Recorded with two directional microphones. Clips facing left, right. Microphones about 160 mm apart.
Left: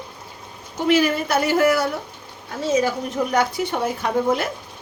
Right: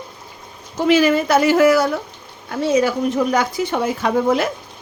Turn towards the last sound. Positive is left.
turn(degrees=-90)